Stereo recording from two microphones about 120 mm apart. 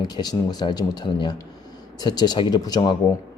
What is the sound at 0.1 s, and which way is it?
Speech, 35° left (ahead or behind).